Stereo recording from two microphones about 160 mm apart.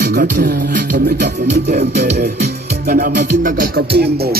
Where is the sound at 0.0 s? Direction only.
65° right (ahead or behind).